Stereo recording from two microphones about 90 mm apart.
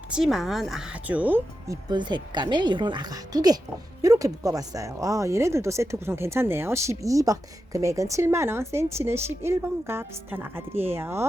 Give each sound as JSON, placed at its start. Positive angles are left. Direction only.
{"t": 0.1, "sound": "a woman's voice", "side_deg": -5}
{"t": 1.9, "sound": "speech", "side_deg": -55}